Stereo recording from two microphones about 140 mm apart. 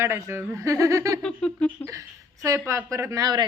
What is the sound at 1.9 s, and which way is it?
Speech, 20° right (ahead or behind).